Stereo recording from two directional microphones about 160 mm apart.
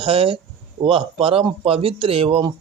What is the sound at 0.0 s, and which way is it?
Speech, 35° right (ahead or behind).